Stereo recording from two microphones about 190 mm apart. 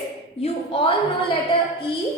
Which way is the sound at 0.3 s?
30° left (ahead or behind).